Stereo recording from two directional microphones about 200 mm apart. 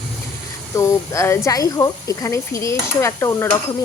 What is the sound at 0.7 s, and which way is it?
Speech, 15° left (ahead or behind).